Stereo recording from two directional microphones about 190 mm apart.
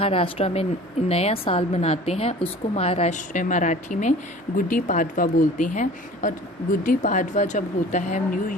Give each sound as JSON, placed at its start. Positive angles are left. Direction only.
{"t": 0.0, "sound": "a woman's voice", "side_deg": 30}